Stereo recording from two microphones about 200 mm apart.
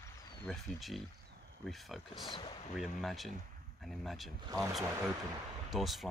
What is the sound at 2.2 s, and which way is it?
Speech, 25° left (ahead or behind).